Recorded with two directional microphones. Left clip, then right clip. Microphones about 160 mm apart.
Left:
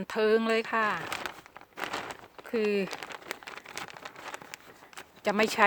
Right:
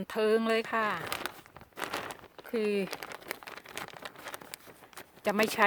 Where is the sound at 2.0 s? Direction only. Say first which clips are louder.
Left 2 dB; 5° left (ahead or behind).